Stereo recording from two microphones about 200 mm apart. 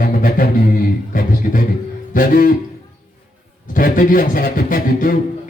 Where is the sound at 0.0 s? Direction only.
45° left (ahead or behind).